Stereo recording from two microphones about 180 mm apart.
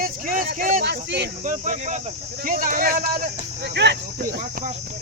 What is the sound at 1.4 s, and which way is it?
Speech, 45° right (ahead or behind).